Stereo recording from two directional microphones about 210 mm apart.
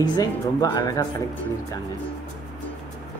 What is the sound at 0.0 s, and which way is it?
Speech, 20° left (ahead or behind).